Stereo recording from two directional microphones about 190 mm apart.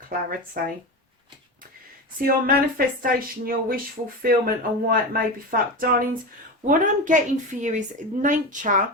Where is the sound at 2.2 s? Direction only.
50° right (ahead or behind).